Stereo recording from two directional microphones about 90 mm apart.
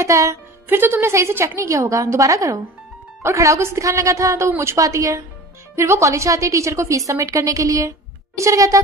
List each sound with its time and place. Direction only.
0.0 s a woman's voice: 35° right (ahead or behind)
0.7 s a woman's voice: 25° right (ahead or behind)